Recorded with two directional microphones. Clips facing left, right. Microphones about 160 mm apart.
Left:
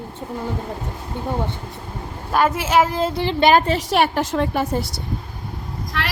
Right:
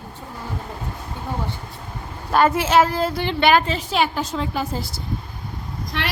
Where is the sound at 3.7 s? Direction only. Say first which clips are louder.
Left 3 dB; 60° left (ahead or behind).